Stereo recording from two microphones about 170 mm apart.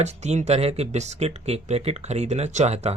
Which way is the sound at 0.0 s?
40° right (ahead or behind).